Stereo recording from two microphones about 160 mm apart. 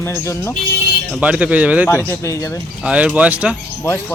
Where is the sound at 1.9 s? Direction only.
15° left (ahead or behind).